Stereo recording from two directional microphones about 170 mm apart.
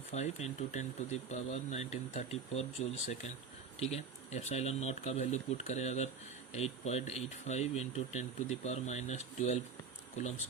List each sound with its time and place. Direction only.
0.1 s speech: 40° left (ahead or behind)